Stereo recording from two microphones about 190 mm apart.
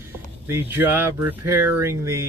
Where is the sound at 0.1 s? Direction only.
10° right (ahead or behind).